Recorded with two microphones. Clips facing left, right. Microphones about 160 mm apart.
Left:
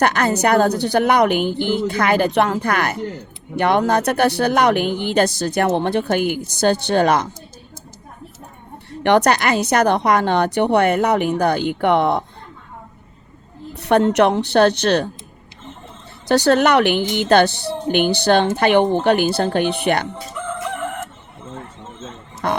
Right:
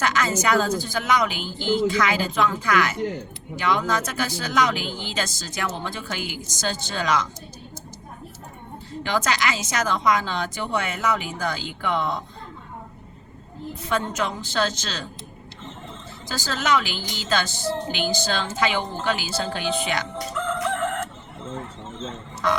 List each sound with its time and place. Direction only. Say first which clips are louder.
0.0 s speech: left 6 dB; 60° left (ahead or behind)
8.9 s speech: left 10 dB; 65° left (ahead or behind)
13.7 s speech: left 12 dB; 70° left (ahead or behind)
16.3 s speech: left 10 dB; 65° left (ahead or behind)
20.3 s crowing: right 2 dB; 10° left (ahead or behind)
22.4 s speech: left 2 dB; 55° left (ahead or behind)